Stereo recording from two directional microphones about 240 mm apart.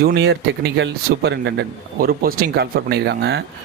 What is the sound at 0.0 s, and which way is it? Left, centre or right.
Speech, right.